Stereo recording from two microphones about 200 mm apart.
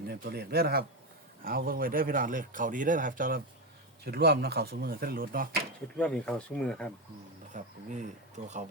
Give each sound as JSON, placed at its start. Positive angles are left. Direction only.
{"t": 0.1, "sound": "speech", "side_deg": -50}
{"t": 6.0, "sound": "speech", "side_deg": 5}
{"t": 7.5, "sound": "speech", "side_deg": -40}